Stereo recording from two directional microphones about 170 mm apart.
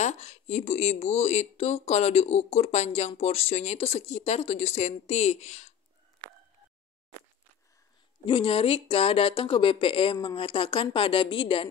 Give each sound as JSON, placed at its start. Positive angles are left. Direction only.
{"t": 0.0, "sound": "speech", "side_deg": 40}
{"t": 8.3, "sound": "speech", "side_deg": 30}